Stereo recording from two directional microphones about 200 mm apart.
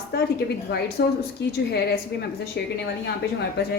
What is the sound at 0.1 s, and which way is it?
A woman's voice, 50° left (ahead or behind).